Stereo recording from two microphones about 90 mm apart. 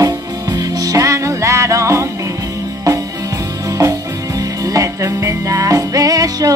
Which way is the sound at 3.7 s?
35° right (ahead or behind).